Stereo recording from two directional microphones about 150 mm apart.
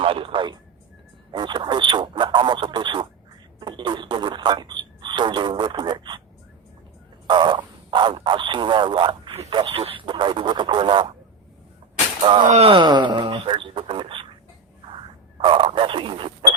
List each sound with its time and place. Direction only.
0.0 s speech: 35° right (ahead or behind)
7.3 s speech: 30° right (ahead or behind)
12.5 s speech: 40° right (ahead or behind)